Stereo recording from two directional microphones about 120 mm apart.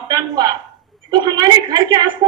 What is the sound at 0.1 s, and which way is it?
A woman's voice, 35° right (ahead or behind).